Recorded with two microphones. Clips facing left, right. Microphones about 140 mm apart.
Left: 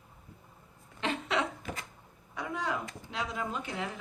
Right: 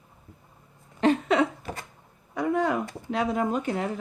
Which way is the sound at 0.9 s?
45° right (ahead or behind).